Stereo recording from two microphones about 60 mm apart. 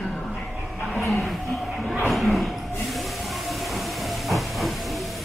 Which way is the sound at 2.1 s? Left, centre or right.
Centre.